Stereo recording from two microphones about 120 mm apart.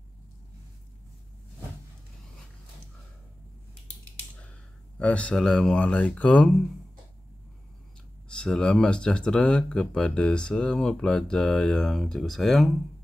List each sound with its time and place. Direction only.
4.9 s speech: 10° left (ahead or behind)
8.3 s speech: 5° left (ahead or behind)